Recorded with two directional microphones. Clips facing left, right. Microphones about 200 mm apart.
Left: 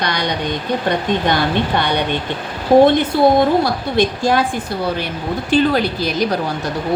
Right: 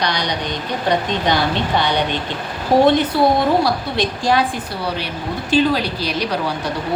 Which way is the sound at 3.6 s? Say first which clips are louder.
Left 3 dB; 50° left (ahead or behind).